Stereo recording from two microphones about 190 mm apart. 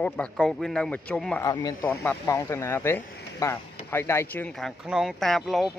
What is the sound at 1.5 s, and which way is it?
A man's voice, 20° left (ahead or behind).